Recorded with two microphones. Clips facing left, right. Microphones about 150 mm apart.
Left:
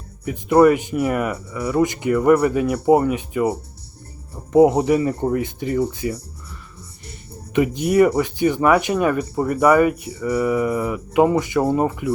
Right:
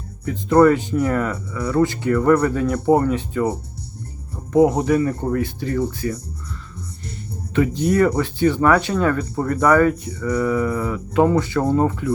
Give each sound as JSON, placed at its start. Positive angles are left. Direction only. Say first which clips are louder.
{"t": 0.3, "sound": "speech", "louder": "even", "side_deg": 15}
{"t": 4.5, "sound": "speech", "louder": "left 2 dB", "side_deg": 20}
{"t": 7.5, "sound": "speech", "louder": "left 1 dB", "side_deg": 15}